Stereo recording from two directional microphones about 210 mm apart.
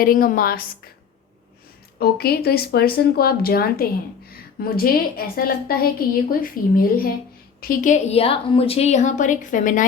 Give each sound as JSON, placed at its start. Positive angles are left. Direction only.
{"t": 0.0, "sound": "speech", "side_deg": 40}
{"t": 2.0, "sound": "a woman's voice", "side_deg": 45}